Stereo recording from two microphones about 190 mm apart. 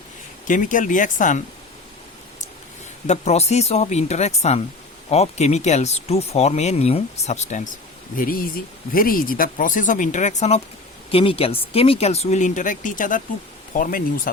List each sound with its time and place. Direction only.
0.4 s speech: 45° left (ahead or behind)
3.1 s speech: 35° left (ahead or behind)